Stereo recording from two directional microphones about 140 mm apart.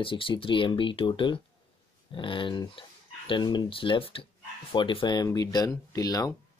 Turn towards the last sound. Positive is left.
turn(degrees=25)  # may be behind; listen again after turning